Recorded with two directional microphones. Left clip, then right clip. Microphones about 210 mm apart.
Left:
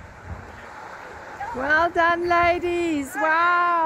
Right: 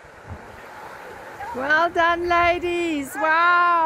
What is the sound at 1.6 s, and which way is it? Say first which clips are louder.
Speech: right 1 dB; 5° right (ahead or behind).